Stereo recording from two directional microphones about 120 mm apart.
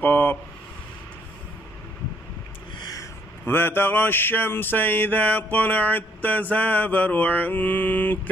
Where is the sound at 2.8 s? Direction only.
30° left (ahead or behind).